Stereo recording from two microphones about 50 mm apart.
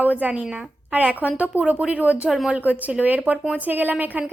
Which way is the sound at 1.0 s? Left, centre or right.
Right.